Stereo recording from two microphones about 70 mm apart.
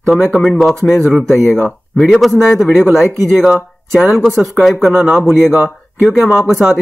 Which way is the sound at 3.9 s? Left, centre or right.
Centre.